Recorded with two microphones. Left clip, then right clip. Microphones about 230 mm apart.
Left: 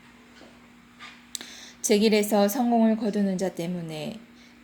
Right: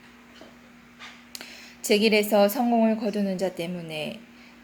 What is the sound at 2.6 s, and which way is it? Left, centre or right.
Speech, left.